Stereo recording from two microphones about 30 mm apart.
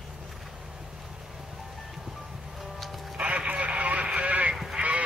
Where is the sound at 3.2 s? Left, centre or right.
Right.